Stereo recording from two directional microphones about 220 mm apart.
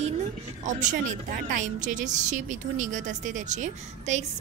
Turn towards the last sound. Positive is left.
turn(degrees=-30)  # may be behind; listen again after turning